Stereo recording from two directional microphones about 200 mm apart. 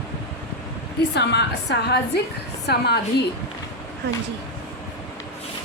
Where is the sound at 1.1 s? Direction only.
60° left (ahead or behind).